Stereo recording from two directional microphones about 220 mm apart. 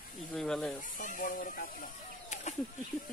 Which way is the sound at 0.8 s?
35° left (ahead or behind).